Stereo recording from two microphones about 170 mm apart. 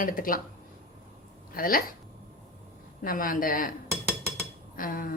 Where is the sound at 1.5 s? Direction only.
55° left (ahead or behind).